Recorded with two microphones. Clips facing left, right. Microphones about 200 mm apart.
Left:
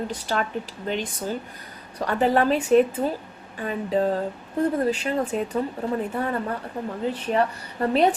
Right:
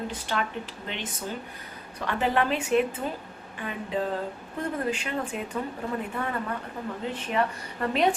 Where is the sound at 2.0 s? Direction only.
40° left (ahead or behind).